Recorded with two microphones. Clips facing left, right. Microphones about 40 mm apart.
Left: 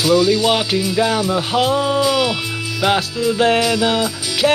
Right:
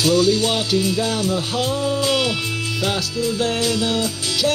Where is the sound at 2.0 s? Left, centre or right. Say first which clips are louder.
Left 3 dB; centre.